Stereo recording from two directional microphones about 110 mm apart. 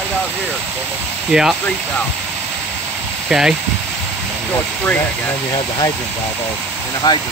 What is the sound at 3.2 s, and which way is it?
Speech, 5° right (ahead or behind).